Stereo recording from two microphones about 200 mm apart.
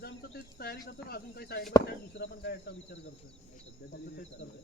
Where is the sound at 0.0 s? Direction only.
50° left (ahead or behind).